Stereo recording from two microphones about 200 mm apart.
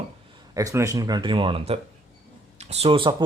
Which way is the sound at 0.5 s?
15° right (ahead or behind).